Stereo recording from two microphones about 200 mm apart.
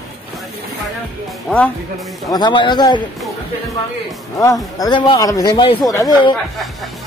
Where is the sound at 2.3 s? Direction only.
20° left (ahead or behind).